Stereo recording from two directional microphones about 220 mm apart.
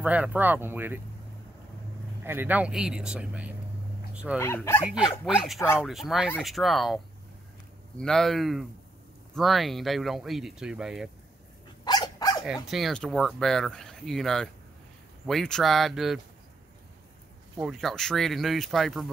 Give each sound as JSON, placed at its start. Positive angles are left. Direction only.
{"t": 0.0, "sound": "speech", "side_deg": -5}
{"t": 2.2, "sound": "speech", "side_deg": -10}
{"t": 4.1, "sound": "dog", "side_deg": -5}
{"t": 4.4, "sound": "speech", "side_deg": 10}
{"t": 5.2, "sound": "speech", "side_deg": 0}
{"t": 8.0, "sound": "speech", "side_deg": 0}
{"t": 11.8, "sound": "dog", "side_deg": 20}
{"t": 12.6, "sound": "speech", "side_deg": 0}
{"t": 17.6, "sound": "speech", "side_deg": 0}